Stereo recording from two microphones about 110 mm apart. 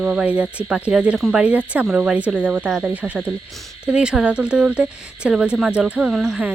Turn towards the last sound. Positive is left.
turn(degrees=0)  # may be behind; listen again after turning